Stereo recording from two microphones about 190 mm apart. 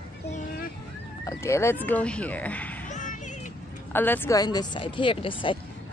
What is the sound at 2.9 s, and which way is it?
Music, 40° left (ahead or behind).